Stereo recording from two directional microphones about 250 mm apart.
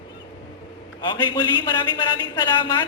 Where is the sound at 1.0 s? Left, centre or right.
Centre.